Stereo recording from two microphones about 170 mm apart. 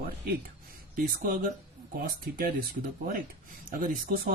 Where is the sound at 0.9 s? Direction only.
60° right (ahead or behind).